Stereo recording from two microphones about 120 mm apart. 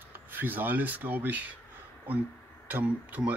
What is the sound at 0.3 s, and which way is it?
Speech, 15° right (ahead or behind).